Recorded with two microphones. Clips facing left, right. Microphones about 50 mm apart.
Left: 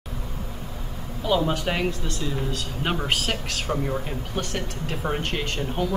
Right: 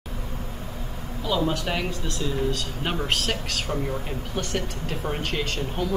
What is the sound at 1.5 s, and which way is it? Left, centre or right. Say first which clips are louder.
Speech: left 2 dB; centre.